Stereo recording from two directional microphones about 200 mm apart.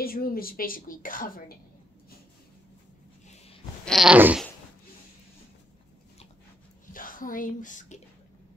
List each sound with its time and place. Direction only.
0.0 s a woman's voice: 50° left (ahead or behind)
3.8 s a sound: centre (ahead or behind)
6.9 s speech: 45° left (ahead or behind)